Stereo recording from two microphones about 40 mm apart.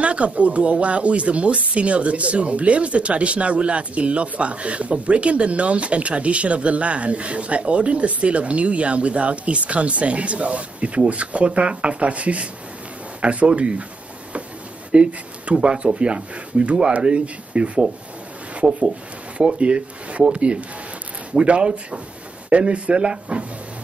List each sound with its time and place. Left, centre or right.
0.0 s speech: right
14.9 s a sound: right
15.6 s speech: right